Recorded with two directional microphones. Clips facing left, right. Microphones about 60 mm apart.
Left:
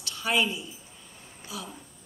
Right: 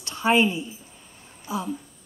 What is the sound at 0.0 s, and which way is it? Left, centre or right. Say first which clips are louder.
A woman's voice: right 7 dB; right.